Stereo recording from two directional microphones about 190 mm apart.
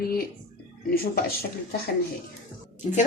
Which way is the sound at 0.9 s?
50° left (ahead or behind).